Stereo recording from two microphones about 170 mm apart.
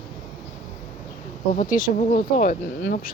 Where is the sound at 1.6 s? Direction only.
50° left (ahead or behind).